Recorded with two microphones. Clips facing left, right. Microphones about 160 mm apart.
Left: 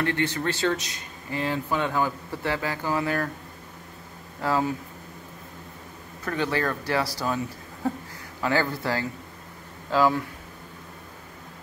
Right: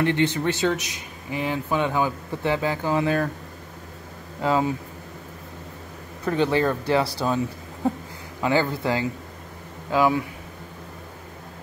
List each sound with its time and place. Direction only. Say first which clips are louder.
0.0 s speech: right 4 dB; 20° right (ahead or behind)
4.4 s speech: right 3 dB; 20° right (ahead or behind)
6.2 s speech: right 5 dB; 25° right (ahead or behind)
8.4 s speech: right 3 dB; 20° right (ahead or behind)